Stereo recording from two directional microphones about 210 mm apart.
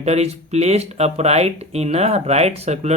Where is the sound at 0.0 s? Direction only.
30° right (ahead or behind).